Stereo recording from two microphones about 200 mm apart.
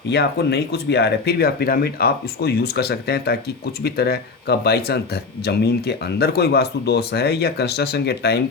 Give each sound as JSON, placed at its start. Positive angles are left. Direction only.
{"t": 0.1, "sound": "speech", "side_deg": 55}